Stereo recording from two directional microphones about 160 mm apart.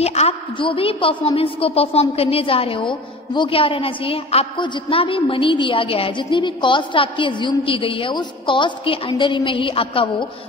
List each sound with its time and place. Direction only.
0.0 s a woman's voice: 40° left (ahead or behind)